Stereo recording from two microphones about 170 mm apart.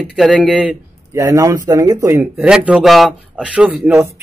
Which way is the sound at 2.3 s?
5° right (ahead or behind).